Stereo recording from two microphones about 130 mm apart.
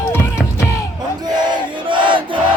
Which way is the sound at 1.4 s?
35° right (ahead or behind).